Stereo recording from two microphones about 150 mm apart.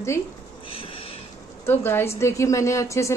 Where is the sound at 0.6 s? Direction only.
40° left (ahead or behind).